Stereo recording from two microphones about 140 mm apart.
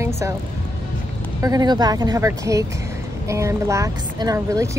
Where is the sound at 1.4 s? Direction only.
25° right (ahead or behind).